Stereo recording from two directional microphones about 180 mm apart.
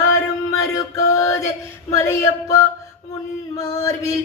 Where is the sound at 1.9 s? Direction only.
15° left (ahead or behind).